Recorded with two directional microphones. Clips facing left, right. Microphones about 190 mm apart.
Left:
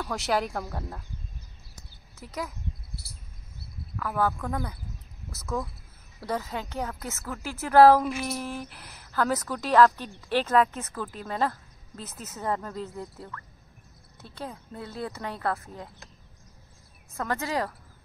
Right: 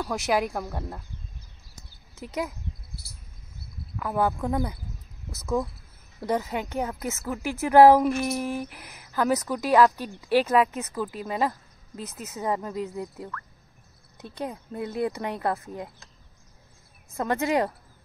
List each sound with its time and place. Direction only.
0.0 s speech: 15° right (ahead or behind)
2.1 s speech: 20° right (ahead or behind)
4.0 s speech: 20° right (ahead or behind)
17.2 s speech: 20° right (ahead or behind)